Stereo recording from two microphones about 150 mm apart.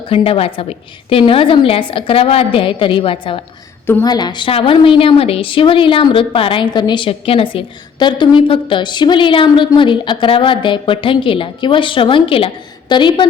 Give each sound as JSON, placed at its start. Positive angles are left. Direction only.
{"t": 0.1, "sound": "a woman's voice", "side_deg": 40}